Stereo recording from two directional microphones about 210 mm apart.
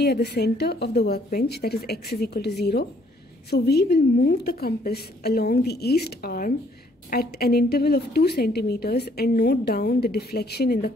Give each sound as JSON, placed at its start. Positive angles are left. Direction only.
{"t": 0.0, "sound": "a woman's voice", "side_deg": 50}